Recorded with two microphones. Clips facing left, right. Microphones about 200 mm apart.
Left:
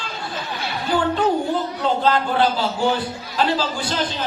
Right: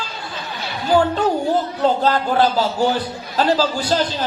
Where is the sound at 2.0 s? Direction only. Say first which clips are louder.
Right 2 dB; 45° right (ahead or behind).